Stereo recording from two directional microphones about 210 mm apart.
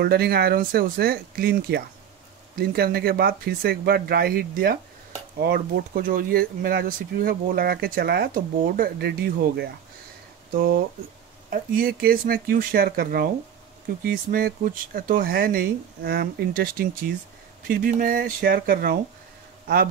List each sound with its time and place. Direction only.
0.0 s speech: 50° right (ahead or behind)
11.5 s speech: 45° right (ahead or behind)